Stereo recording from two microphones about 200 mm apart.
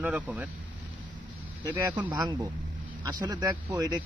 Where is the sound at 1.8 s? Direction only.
10° right (ahead or behind).